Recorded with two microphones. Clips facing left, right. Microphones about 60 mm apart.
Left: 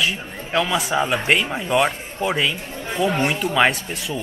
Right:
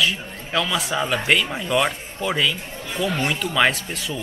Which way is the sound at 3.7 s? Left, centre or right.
Centre.